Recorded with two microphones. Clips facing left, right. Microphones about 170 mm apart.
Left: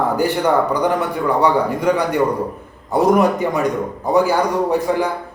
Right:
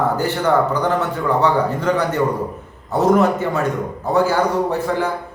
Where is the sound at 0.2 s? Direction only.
15° left (ahead or behind).